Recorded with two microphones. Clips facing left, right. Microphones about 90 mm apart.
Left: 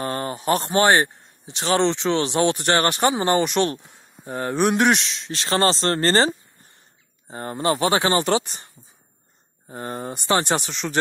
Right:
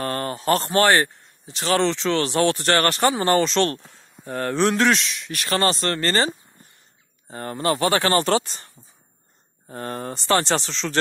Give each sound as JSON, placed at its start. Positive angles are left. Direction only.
{"t": 0.0, "sound": "a man's voice", "side_deg": 20}